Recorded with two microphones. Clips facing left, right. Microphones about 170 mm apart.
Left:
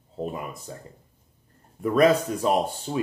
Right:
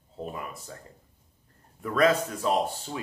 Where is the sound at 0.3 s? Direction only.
20° left (ahead or behind).